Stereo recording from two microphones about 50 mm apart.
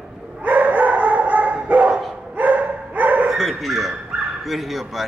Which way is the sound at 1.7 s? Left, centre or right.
Right.